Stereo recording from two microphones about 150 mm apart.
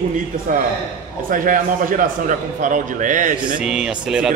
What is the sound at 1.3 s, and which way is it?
A man's voice, 65° right (ahead or behind).